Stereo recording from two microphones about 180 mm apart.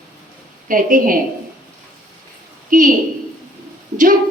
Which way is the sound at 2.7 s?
45° right (ahead or behind).